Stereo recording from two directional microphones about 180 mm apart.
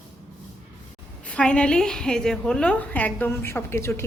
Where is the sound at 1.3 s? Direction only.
5° left (ahead or behind).